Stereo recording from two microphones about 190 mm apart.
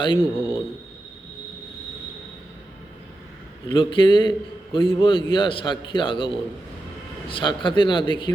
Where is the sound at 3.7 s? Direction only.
25° left (ahead or behind).